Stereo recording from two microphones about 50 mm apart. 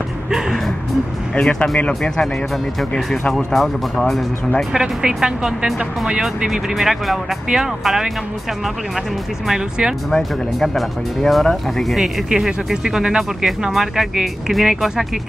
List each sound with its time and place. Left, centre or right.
1.8 s speech: centre
4.7 s speech: centre
6.2 s speech: centre
10.1 s speech: centre